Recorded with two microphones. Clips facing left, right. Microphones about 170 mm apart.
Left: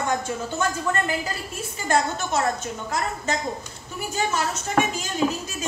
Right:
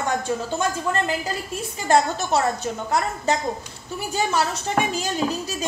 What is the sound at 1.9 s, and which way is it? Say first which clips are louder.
Speech: right 4 dB; 35° right (ahead or behind).